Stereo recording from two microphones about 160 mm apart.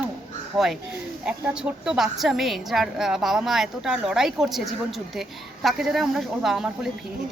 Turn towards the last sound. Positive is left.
turn(degrees=-5)  # may be behind; listen again after turning